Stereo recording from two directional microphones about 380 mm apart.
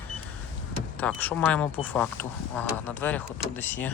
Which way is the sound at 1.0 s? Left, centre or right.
Centre.